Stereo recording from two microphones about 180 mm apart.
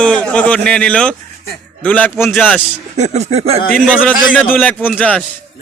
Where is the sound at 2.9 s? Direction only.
40° right (ahead or behind).